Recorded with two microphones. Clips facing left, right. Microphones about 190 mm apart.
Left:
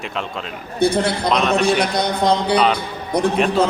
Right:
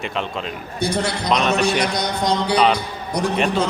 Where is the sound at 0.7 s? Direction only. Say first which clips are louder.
Left 5 dB; 55° left (ahead or behind).